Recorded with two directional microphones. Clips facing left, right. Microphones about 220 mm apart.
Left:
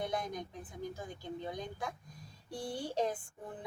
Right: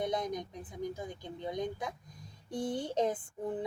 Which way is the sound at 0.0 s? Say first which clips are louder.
Right 4 dB; 20° right (ahead or behind).